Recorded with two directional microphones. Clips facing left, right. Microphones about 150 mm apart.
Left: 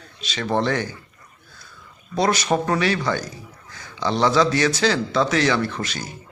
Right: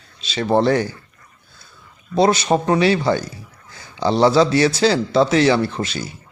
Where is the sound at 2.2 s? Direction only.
30° right (ahead or behind).